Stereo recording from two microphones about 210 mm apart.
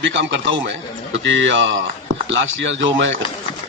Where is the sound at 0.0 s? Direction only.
60° right (ahead or behind).